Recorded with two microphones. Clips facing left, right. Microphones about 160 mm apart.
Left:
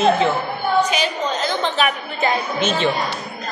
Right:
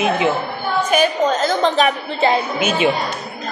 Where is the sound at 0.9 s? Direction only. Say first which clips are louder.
Right 6 dB; 45° right (ahead or behind).